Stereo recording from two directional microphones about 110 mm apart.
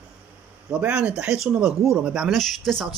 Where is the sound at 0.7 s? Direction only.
10° right (ahead or behind).